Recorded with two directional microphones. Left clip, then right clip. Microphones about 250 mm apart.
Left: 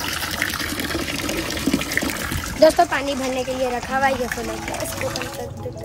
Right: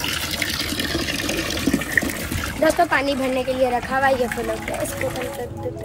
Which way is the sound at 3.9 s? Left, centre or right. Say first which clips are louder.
Left 1 dB; centre.